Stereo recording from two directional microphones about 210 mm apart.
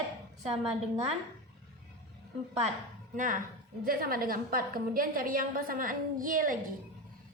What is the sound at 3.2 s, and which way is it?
A woman's voice, 40° right (ahead or behind).